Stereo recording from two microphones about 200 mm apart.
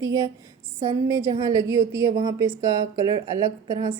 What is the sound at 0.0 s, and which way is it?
A woman's voice, 15° right (ahead or behind).